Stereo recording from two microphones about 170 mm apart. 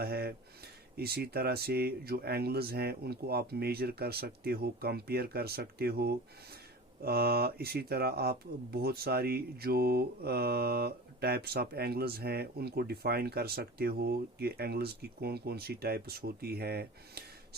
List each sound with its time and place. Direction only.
0.0 s speech: 65° right (ahead or behind)